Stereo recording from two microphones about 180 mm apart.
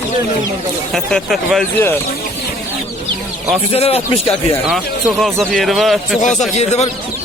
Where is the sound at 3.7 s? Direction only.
35° left (ahead or behind).